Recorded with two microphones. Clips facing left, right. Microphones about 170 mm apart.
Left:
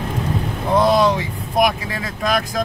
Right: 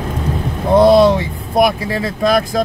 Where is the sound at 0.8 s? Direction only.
30° right (ahead or behind).